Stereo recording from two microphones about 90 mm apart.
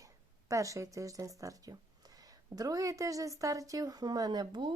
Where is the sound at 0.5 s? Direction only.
35° right (ahead or behind).